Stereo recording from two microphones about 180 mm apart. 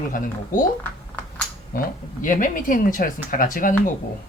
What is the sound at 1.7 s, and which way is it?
Speech, 55° left (ahead or behind).